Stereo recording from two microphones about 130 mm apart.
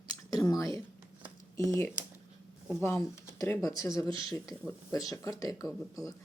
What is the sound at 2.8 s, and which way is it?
Speech, 20° left (ahead or behind).